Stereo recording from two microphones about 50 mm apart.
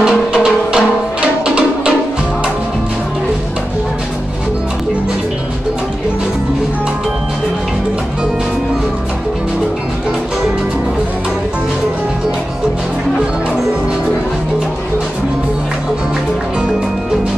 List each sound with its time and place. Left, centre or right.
0.0 s music: centre